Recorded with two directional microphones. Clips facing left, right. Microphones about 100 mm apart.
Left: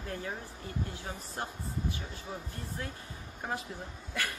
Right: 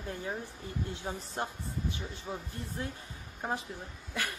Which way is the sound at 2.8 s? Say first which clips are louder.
Right 3 dB; 25° right (ahead or behind).